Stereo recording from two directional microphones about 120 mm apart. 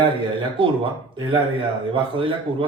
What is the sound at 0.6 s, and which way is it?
Speech, 45° right (ahead or behind).